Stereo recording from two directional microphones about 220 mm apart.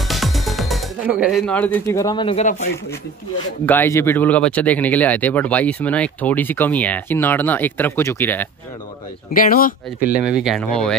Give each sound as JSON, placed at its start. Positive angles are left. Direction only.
{"t": 0.1, "sound": "music", "side_deg": 0}
{"t": 3.6, "sound": "speech", "side_deg": 10}
{"t": 9.3, "sound": "speech", "side_deg": 40}
{"t": 10.0, "sound": "speech", "side_deg": -5}